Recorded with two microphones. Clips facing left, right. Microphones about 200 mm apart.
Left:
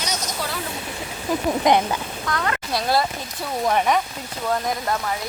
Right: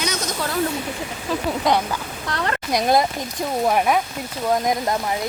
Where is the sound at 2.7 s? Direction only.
20° right (ahead or behind).